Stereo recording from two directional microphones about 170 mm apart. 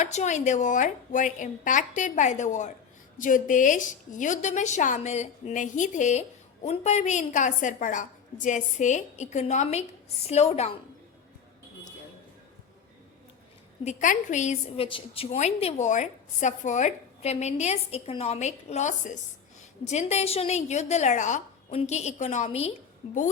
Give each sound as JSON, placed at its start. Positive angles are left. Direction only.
{"t": 0.0, "sound": "a woman's voice", "side_deg": 45}
{"t": 13.8, "sound": "a woman's voice", "side_deg": 45}
{"t": 14.8, "sound": "a woman's voice", "side_deg": 30}